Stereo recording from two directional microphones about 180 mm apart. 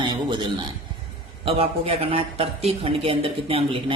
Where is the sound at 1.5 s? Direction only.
35° right (ahead or behind).